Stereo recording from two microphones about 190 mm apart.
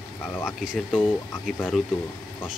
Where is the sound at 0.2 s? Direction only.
10° left (ahead or behind).